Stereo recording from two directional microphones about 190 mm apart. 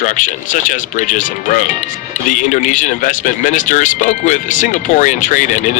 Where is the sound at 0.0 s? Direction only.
40° left (ahead or behind).